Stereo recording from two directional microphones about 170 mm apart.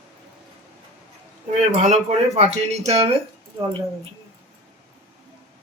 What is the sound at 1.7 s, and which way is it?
Speech, 40° right (ahead or behind).